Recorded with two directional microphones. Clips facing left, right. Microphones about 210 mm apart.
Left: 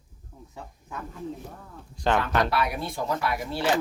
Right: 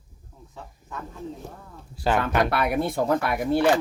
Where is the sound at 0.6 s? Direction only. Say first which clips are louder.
Even; 15° left (ahead or behind).